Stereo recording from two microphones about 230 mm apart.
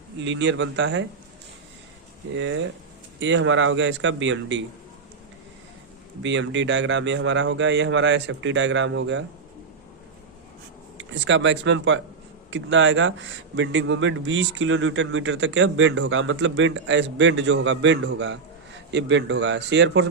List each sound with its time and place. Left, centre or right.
0.2 s a man's voice: right
2.3 s a man's voice: right
6.2 s a man's voice: right
10.9 s a man's voice: right